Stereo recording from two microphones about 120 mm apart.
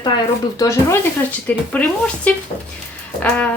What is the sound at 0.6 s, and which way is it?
Speech, 25° left (ahead or behind).